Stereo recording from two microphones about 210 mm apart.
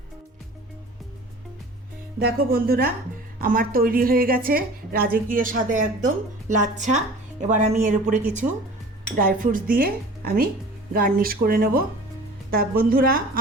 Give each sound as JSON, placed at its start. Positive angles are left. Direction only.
{"t": 2.1, "sound": "a woman's voice", "side_deg": -45}